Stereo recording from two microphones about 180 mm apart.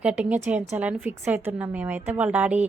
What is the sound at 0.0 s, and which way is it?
Speech, 5° right (ahead or behind).